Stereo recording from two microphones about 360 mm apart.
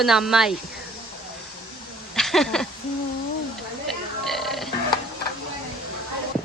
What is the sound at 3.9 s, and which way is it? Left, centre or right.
Burping, centre.